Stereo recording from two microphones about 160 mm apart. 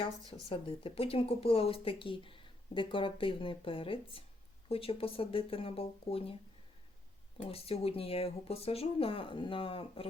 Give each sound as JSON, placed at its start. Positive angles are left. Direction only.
{"t": 0.4, "sound": "speech", "side_deg": 35}
{"t": 7.4, "sound": "speech", "side_deg": 40}